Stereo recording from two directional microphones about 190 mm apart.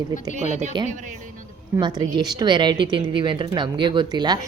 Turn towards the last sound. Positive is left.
turn(degrees=-25)  # may be behind; listen again after turning